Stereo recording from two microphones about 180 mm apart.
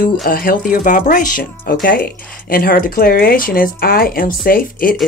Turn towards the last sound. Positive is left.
turn(degrees=50)  # may be behind; listen again after turning